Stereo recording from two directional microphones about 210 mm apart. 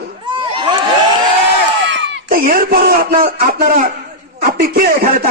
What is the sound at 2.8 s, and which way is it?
A man's voice, 45° right (ahead or behind).